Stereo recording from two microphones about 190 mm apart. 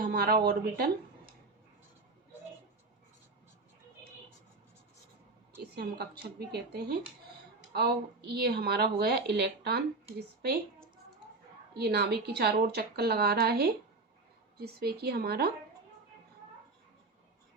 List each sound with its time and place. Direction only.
0.0 s a woman's voice: 55° right (ahead or behind)
5.7 s a woman's voice: 60° right (ahead or behind)
11.7 s a woman's voice: 60° right (ahead or behind)